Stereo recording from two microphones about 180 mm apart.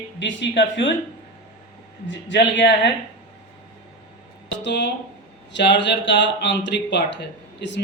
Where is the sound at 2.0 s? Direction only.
80° left.